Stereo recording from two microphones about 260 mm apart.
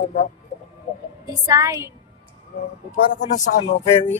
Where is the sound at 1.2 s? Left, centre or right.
Centre.